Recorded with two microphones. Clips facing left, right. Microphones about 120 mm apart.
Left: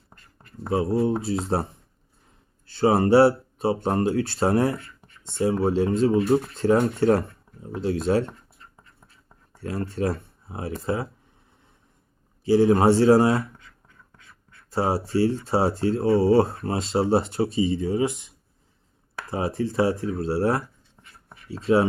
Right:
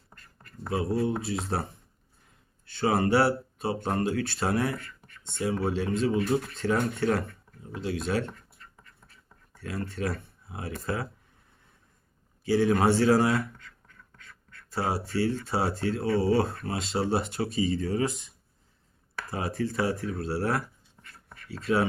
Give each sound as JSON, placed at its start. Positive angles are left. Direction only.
{"t": 0.1, "sound": "a sound", "side_deg": 25}
{"t": 2.6, "sound": "speech", "side_deg": 30}
{"t": 8.3, "sound": "writing", "side_deg": 25}
{"t": 9.6, "sound": "speech", "side_deg": 35}
{"t": 12.5, "sound": "speech", "side_deg": 30}
{"t": 13.6, "sound": "duck", "side_deg": 15}
{"t": 14.7, "sound": "speech", "side_deg": 30}
{"t": 21.0, "sound": "writing", "side_deg": 20}